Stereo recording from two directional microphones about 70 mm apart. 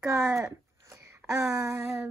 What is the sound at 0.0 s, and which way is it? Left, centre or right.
Speech, right.